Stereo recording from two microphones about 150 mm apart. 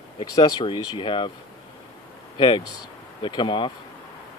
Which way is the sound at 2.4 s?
30° left (ahead or behind).